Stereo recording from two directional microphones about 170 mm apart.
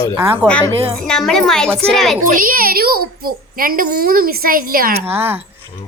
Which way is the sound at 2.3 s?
55° right (ahead or behind).